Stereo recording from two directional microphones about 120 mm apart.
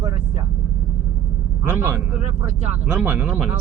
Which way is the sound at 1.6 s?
20° right (ahead or behind).